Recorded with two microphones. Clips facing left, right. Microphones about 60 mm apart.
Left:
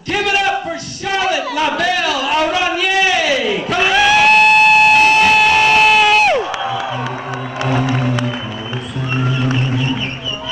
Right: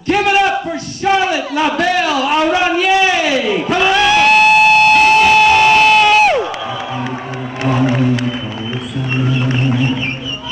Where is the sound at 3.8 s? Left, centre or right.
Centre.